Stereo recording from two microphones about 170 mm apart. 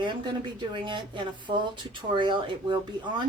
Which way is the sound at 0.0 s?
25° right (ahead or behind).